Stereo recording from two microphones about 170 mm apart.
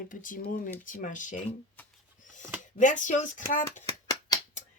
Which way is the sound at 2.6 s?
45° left (ahead or behind).